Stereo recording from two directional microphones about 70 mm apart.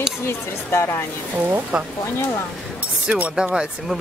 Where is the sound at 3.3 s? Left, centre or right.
Centre.